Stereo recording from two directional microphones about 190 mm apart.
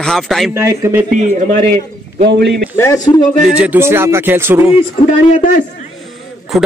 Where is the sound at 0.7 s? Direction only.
15° right (ahead or behind).